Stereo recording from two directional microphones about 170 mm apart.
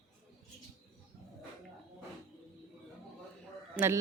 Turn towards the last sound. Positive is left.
turn(degrees=-10)  # may be behind; listen again after turning